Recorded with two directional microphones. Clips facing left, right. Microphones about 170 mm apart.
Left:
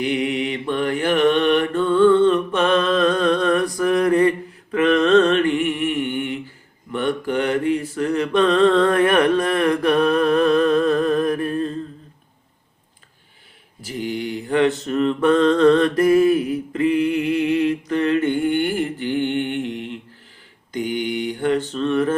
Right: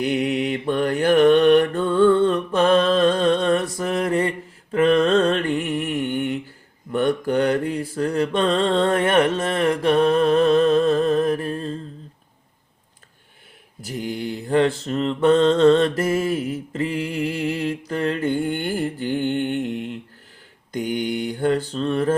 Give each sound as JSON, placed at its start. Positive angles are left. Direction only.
{"t": 0.0, "sound": "mantra", "side_deg": -40}
{"t": 14.1, "sound": "mantra", "side_deg": -35}
{"t": 20.7, "sound": "mantra", "side_deg": -40}